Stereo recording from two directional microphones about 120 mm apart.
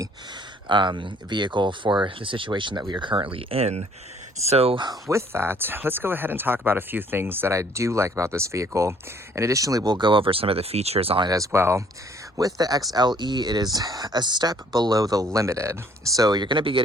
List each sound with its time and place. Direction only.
0.7 s speech: 40° right (ahead or behind)
4.9 s speech: 25° right (ahead or behind); by 11.3 s 55° right (ahead or behind)
11.3 s speech: 25° right (ahead or behind); by 16.8 s 45° right (ahead or behind)